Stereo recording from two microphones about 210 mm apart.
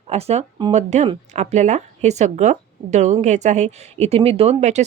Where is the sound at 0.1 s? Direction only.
30° right (ahead or behind).